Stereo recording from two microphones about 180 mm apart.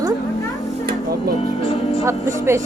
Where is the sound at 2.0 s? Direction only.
15° right (ahead or behind).